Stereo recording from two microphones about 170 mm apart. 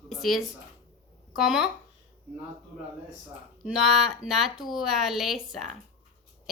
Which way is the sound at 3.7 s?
Centre (ahead or behind).